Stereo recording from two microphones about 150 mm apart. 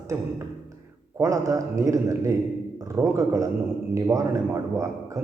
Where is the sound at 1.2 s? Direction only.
20° right (ahead or behind).